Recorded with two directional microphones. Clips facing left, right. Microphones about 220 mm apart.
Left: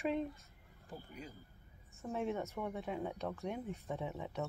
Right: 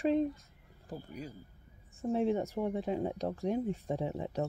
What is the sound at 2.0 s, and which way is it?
Speech, 30° right (ahead or behind).